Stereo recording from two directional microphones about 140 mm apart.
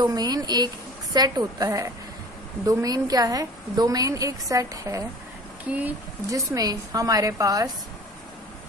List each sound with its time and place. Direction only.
0.0 s a woman's voice: 30° right (ahead or behind)
5.7 s speech: 10° right (ahead or behind)
6.3 s a woman's voice: 25° right (ahead or behind)